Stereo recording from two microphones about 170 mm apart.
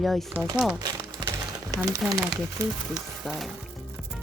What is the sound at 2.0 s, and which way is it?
Speech, centre (ahead or behind).